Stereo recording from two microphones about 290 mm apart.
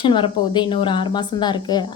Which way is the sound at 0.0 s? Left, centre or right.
Centre.